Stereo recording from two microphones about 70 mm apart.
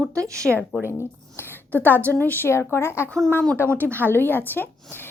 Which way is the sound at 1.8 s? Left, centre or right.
Right.